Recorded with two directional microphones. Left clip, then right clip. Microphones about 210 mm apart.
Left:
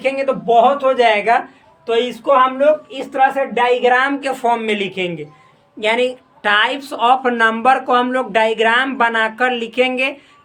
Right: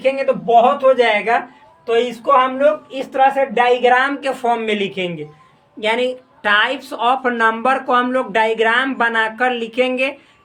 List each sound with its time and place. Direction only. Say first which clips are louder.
0.0 s speech: right 1 dB; 20° left (ahead or behind)